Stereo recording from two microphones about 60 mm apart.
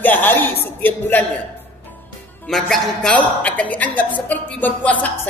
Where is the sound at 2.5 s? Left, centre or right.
Centre.